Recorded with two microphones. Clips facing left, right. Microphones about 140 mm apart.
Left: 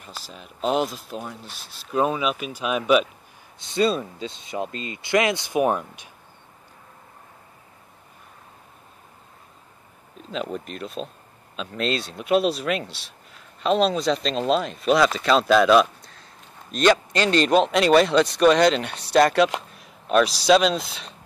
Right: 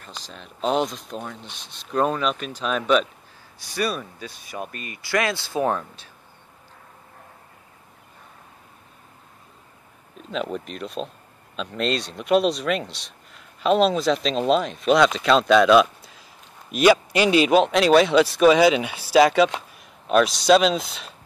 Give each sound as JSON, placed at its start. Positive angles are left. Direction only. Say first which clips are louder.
{"t": 0.0, "sound": "speech", "louder": "even", "side_deg": 5}
{"t": 3.5, "sound": "speech", "louder": "left 5 dB", "side_deg": 25}
{"t": 10.3, "sound": "speech", "louder": "right 1 dB", "side_deg": 0}